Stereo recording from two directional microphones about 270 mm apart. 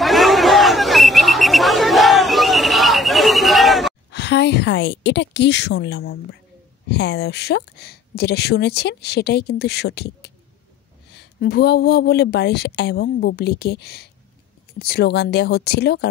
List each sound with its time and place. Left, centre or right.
0.0 s chatter: centre
4.1 s speech: left